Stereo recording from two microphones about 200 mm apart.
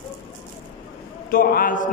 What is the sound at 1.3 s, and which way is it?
Speech, 45° left (ahead or behind).